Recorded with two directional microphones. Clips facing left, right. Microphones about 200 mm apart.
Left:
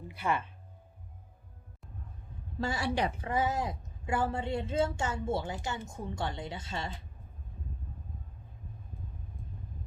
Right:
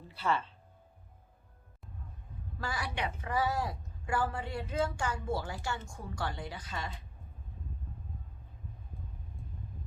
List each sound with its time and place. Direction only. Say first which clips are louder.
0.1 s speech: even; 15° left (ahead or behind)
2.6 s a woman's voice: left 6 dB; 25° left (ahead or behind)
3.2 s a woman's voice: left 1 dB; 20° left (ahead or behind)